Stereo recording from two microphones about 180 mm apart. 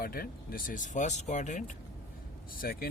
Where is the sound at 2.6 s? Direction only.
55° left (ahead or behind).